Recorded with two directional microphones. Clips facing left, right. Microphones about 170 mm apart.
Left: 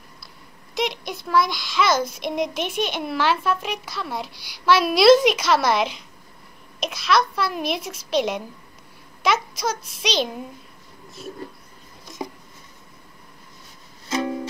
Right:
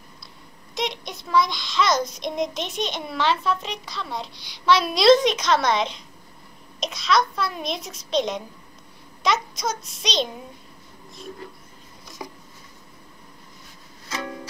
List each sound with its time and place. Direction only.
0.7 s child singing: centre (ahead or behind)
12.2 s a sound: 25° left (ahead or behind)
14.0 s music: 25° left (ahead or behind)